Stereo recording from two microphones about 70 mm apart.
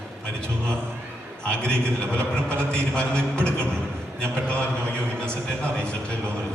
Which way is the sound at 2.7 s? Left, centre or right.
Centre.